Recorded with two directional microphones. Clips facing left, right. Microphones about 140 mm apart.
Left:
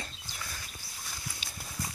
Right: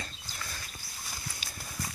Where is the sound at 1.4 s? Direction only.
25° left (ahead or behind).